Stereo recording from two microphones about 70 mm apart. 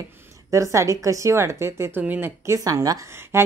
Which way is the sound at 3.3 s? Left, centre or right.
Right.